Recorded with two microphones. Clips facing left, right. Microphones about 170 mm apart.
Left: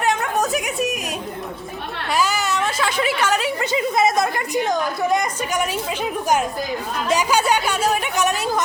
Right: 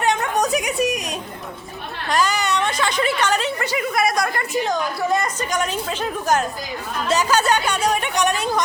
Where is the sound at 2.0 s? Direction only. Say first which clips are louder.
Right 1 dB; 5° left (ahead or behind).